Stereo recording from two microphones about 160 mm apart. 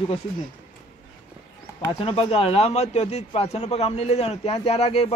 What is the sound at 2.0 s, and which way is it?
A man's voice, 35° left (ahead or behind).